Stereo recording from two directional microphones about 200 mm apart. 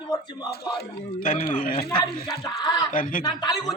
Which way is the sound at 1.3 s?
40° left (ahead or behind).